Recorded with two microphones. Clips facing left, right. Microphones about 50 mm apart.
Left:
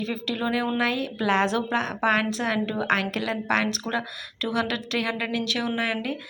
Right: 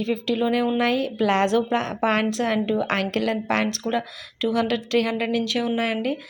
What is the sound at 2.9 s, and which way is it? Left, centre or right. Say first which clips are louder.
Speech: right 2 dB; right.